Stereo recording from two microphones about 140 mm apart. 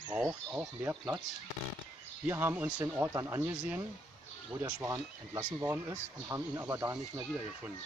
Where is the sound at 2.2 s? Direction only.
15° right (ahead or behind).